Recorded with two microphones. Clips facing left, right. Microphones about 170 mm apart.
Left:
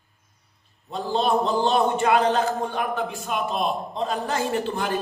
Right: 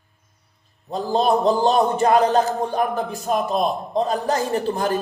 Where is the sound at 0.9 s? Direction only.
40° right (ahead or behind).